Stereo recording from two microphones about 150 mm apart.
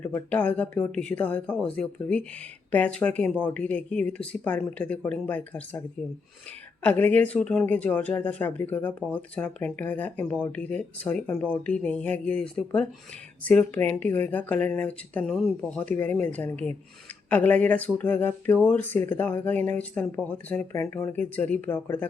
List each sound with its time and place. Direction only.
0.0 s speech: 10° left (ahead or behind)
6.8 s speech: 10° left (ahead or behind)
15.3 s speech: 5° right (ahead or behind)
15.7 s speech: 10° left (ahead or behind)